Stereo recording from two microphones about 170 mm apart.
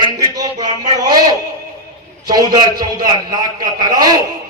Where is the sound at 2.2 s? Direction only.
25° right (ahead or behind).